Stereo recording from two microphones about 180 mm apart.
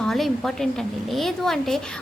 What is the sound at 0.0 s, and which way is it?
A woman's voice, centre (ahead or behind).